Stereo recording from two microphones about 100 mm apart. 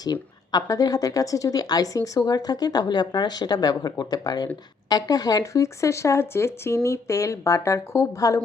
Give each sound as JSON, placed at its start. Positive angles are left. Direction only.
{"t": 0.0, "sound": "speech", "side_deg": 40}